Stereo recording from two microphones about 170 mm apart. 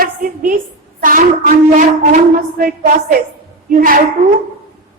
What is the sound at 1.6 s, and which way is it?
Speech, 45° right (ahead or behind).